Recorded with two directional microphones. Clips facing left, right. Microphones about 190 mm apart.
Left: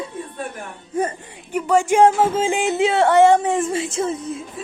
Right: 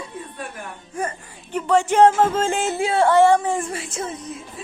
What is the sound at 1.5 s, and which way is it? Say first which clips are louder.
A woman's voice: left 1 dB; 10° left (ahead or behind).